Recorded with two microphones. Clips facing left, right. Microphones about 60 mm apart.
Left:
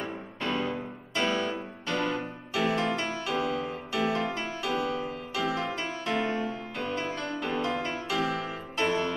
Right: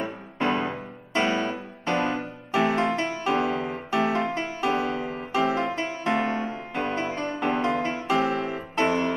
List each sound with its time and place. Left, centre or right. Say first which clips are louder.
0.0 s music: right 6 dB; right